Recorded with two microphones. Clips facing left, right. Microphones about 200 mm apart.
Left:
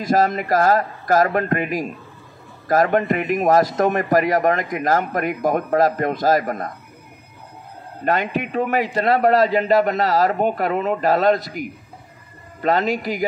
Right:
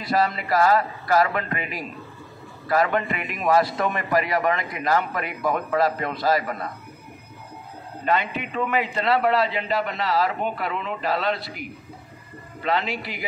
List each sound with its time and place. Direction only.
0.0 s a man's voice: 45° left (ahead or behind)
8.0 s a man's voice: 45° left (ahead or behind)